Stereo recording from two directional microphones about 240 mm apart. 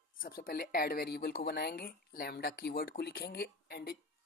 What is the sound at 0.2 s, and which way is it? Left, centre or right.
Speech, left.